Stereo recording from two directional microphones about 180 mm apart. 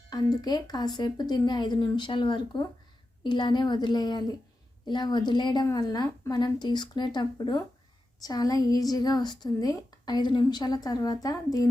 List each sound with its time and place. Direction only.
0.1 s a woman's voice: 20° left (ahead or behind)